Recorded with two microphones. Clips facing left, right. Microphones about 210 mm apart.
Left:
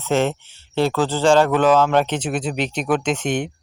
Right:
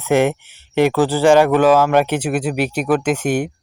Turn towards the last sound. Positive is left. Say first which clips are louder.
# right 4 dB
turn(degrees=-10)  # may be behind; listen again after turning